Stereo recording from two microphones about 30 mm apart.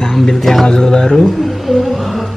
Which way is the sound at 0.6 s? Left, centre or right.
Left.